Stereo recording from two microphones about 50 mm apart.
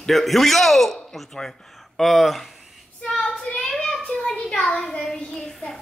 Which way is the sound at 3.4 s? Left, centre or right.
Left.